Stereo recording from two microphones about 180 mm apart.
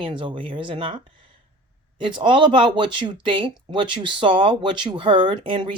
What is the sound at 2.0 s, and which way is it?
Speech, 25° right (ahead or behind).